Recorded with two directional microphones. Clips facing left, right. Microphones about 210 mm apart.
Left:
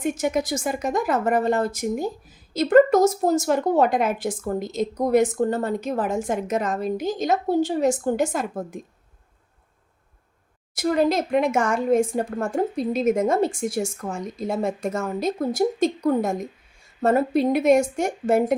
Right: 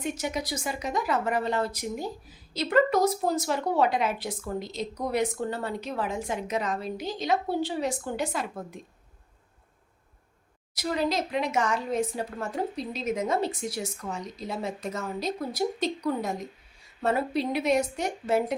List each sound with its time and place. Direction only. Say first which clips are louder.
0.0 s speech: left 8 dB; 50° left (ahead or behind)
10.8 s speech: left 7 dB; 50° left (ahead or behind)